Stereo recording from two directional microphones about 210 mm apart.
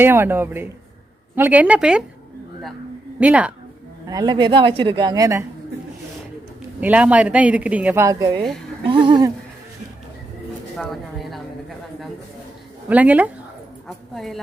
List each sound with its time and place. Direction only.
0.0 s speech: 10° right (ahead or behind)
3.2 s speech: 5° right (ahead or behind)
4.0 s speech: 20° right (ahead or behind)
6.7 s speech: 5° right (ahead or behind); by 9.3 s 20° right (ahead or behind)
10.8 s speech: centre (ahead or behind)
12.9 s a woman's voice: 5° right (ahead or behind)